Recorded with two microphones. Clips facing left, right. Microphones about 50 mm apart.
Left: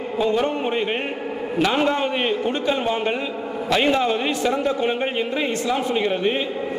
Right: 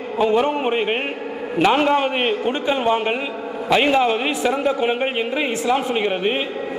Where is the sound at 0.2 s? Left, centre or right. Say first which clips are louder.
Right 3 dB; right.